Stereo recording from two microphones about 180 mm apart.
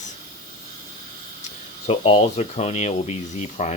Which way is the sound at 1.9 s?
30° left (ahead or behind).